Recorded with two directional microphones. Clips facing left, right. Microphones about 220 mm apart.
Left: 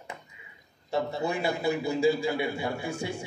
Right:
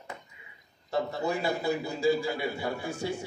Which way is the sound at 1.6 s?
10° left (ahead or behind).